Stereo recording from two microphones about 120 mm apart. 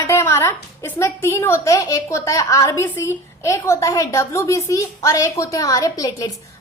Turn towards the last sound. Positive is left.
turn(degrees=35)  # may be behind; listen again after turning